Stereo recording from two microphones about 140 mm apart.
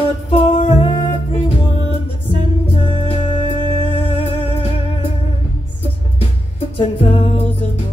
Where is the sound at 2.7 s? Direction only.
40° left (ahead or behind).